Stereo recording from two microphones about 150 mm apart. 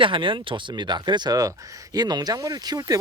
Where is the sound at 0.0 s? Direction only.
35° right (ahead or behind).